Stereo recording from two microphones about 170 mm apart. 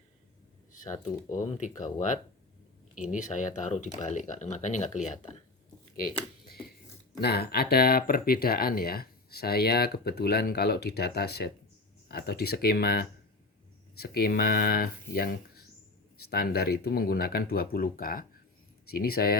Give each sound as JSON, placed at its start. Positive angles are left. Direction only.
{"t": 1.5, "sound": "speech", "side_deg": 45}
{"t": 7.2, "sound": "speech", "side_deg": 70}